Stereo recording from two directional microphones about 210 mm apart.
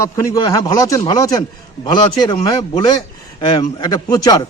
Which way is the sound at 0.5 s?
15° left (ahead or behind).